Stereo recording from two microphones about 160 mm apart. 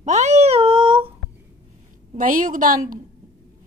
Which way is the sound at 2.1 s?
55° right (ahead or behind).